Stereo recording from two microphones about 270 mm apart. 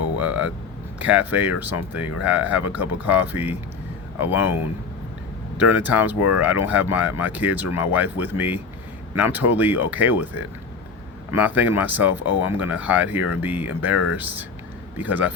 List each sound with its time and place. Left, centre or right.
0.2 s vehicle: centre
0.9 s speech: centre
5.5 s speech: centre
11.3 s speech: centre
13.9 s speech: left
14.9 s speech: centre